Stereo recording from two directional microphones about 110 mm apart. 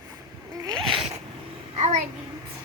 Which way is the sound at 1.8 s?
90° right.